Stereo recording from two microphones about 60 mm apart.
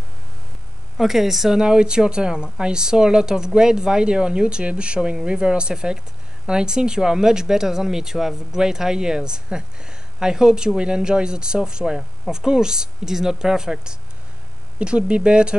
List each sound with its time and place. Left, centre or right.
0.9 s speech: centre